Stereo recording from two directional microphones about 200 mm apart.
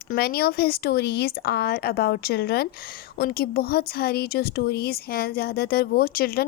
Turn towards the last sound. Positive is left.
turn(degrees=50)  # may be behind; listen again after turning